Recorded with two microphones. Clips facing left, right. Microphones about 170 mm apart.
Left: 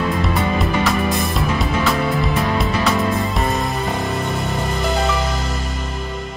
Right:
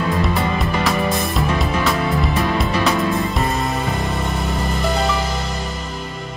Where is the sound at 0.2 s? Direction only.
Centre (ahead or behind).